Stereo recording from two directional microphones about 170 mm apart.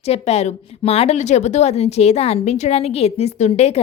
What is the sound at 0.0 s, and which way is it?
A woman's voice, 40° left (ahead or behind).